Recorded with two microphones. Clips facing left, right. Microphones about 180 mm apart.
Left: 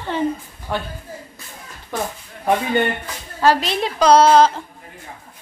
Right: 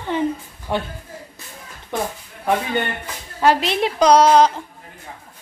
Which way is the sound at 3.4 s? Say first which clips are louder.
Even; 20° right (ahead or behind).